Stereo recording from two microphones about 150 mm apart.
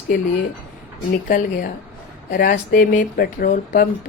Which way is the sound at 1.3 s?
65° left (ahead or behind).